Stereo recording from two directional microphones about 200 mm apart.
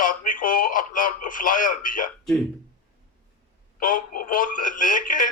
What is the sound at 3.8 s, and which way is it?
Synthetic singing, 40° left (ahead or behind).